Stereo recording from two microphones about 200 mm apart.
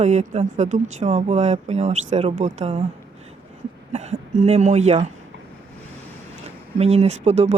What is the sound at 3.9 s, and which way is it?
Speech, 35° right (ahead or behind).